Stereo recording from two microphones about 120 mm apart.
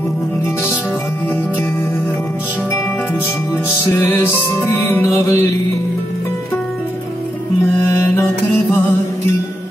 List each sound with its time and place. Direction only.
3.9 s music: 20° left (ahead or behind)
7.6 s music: 20° left (ahead or behind)